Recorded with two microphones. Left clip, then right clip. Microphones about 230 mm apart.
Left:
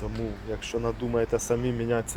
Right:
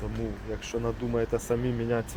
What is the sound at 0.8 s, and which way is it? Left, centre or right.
Speech, centre.